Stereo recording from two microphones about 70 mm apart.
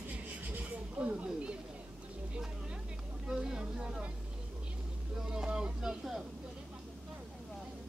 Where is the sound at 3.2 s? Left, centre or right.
Centre.